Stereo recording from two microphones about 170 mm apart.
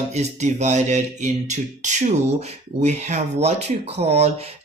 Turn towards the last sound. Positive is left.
turn(degrees=-40)  # may be behind; listen again after turning